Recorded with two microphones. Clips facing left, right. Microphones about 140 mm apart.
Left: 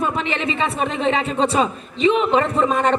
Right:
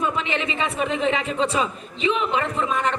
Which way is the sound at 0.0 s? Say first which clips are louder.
Left 2 dB; 45° left (ahead or behind).